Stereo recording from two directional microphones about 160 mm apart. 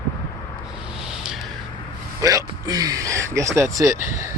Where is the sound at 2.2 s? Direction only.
20° right (ahead or behind).